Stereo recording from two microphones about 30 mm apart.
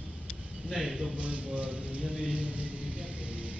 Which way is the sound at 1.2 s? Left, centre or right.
Right.